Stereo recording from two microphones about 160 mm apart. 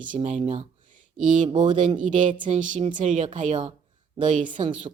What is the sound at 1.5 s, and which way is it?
Speech, 30° right (ahead or behind).